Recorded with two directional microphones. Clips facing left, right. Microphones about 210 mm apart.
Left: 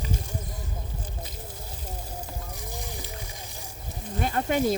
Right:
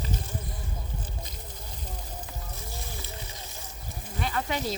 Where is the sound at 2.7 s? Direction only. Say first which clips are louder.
Left 3 dB; 15° left (ahead or behind).